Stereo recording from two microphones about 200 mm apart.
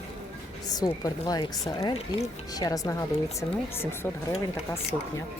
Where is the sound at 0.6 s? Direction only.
20° left (ahead or behind).